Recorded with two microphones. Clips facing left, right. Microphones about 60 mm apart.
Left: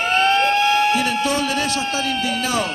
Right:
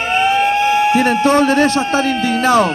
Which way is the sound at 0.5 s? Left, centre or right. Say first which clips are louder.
Right 4 dB; right.